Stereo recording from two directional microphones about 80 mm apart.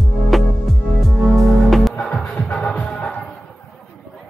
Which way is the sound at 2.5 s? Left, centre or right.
Centre.